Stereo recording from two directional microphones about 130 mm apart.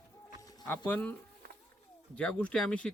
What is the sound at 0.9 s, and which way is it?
Speech, 10° left (ahead or behind).